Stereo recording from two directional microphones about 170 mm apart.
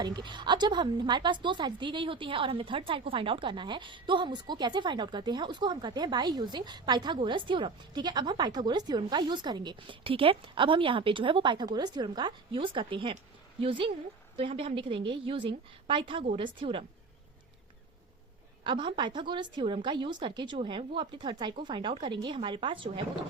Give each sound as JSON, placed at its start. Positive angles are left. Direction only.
{"t": 0.0, "sound": "a woman's voice", "side_deg": -25}
{"t": 18.6, "sound": "a woman's voice", "side_deg": -30}